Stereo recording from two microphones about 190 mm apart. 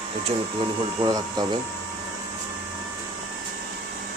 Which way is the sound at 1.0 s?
20° right (ahead or behind).